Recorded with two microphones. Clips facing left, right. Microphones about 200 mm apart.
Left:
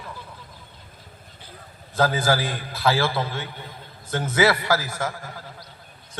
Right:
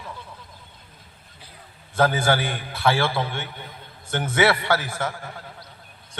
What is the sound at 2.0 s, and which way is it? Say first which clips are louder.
A man's voice: right 1 dB; 25° right (ahead or behind).